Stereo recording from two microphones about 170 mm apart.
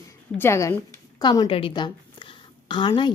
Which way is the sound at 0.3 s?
15° left (ahead or behind).